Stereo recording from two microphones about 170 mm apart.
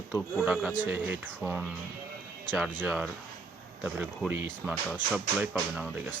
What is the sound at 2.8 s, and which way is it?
Speech, 5° right (ahead or behind).